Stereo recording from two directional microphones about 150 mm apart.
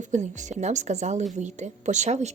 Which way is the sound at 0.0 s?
55° right (ahead or behind).